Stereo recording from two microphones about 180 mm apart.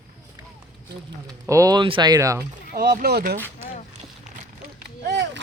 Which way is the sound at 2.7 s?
55° right (ahead or behind).